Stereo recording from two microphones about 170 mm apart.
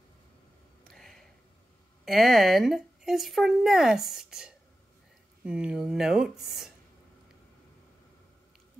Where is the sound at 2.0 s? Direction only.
Centre (ahead or behind).